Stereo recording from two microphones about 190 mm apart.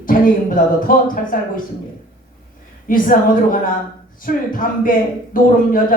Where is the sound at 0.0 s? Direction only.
45° left (ahead or behind).